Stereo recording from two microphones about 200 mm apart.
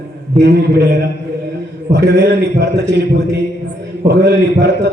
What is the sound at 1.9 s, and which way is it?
A man's voice, 60° right (ahead or behind).